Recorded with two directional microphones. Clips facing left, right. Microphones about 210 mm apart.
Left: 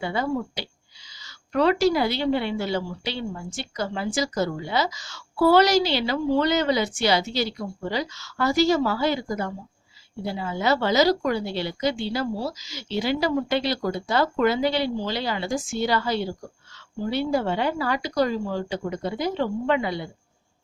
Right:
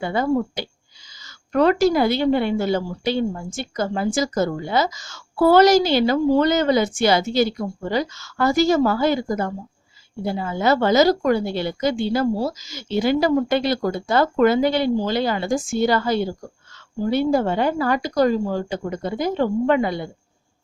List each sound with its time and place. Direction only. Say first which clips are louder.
0.0 s a woman's voice: right 5 dB; 50° right (ahead or behind)